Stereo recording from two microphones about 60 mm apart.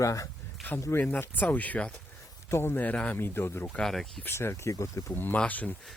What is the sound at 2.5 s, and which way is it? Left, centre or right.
Speech, left.